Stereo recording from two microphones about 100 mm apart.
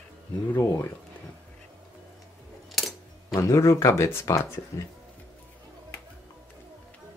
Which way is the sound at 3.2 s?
30° left (ahead or behind).